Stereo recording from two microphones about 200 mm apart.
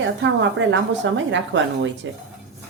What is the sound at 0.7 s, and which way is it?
A woman's voice, 70° right (ahead or behind).